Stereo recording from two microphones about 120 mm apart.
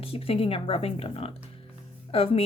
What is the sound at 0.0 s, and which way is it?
A woman's voice, 55° left (ahead or behind).